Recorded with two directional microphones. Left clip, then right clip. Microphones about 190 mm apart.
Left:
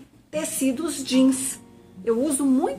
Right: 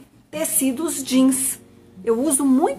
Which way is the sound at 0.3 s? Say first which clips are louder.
Right 2 dB; 15° right (ahead or behind).